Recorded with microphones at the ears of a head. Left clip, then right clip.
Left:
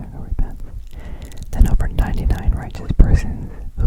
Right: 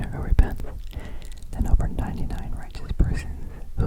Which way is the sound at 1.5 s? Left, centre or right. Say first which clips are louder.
Left 6 dB; left.